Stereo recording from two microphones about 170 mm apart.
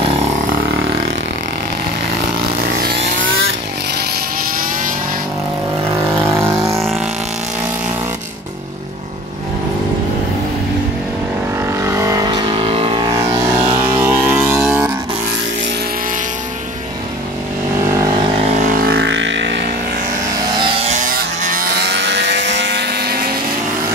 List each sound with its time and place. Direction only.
6.1 s vehicle: 15° right (ahead or behind)
11.8 s vehicle: 15° right (ahead or behind)
13.6 s vehicle: 30° right (ahead or behind)
13.9 s vehicle: 15° right (ahead or behind)
17.9 s vehicle: 20° right (ahead or behind)
18.4 s vehicle: 40° right (ahead or behind); by 19.7 s 90° right
20.3 s vehicle: 30° right (ahead or behind); by 22.0 s 55° right (ahead or behind)
22.0 s vehicle: 90° right; by 23.3 s 65° right (ahead or behind)